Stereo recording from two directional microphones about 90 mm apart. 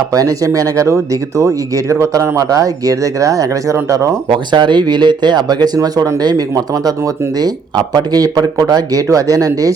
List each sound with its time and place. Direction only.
0.1 s speech: 40° right (ahead or behind)
4.3 s speech: 60° right (ahead or behind); by 9.7 s 40° right (ahead or behind)